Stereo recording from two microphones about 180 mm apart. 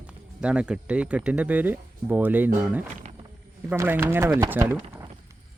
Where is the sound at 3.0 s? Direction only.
35° right (ahead or behind).